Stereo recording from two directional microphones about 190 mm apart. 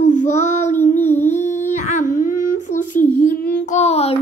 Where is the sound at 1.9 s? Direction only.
40° left (ahead or behind).